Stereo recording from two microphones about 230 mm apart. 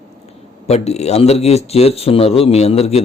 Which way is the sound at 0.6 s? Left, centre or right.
Left.